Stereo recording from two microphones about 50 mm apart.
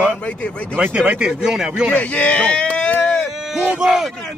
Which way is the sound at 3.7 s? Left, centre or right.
Centre.